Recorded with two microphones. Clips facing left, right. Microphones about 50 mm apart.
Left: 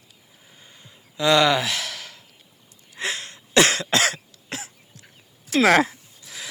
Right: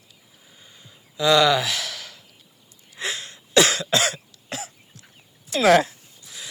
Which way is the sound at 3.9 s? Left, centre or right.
Left.